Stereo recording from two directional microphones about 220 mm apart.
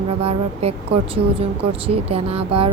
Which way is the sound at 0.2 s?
25° right (ahead or behind).